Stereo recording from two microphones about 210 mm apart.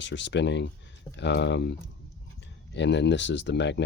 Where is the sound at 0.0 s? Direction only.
60° left (ahead or behind).